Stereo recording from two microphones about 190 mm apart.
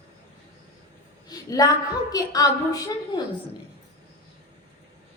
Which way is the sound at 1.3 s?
20° left (ahead or behind).